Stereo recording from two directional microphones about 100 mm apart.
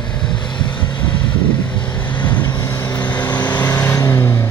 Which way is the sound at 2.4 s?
35° left (ahead or behind).